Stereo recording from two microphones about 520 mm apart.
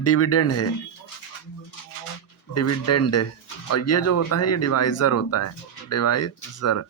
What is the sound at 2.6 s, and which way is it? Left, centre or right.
Speech, left.